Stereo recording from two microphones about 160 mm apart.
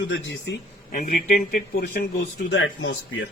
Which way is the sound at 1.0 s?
50° left (ahead or behind).